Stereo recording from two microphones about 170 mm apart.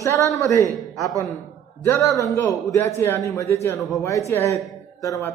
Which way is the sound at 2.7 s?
15° left (ahead or behind).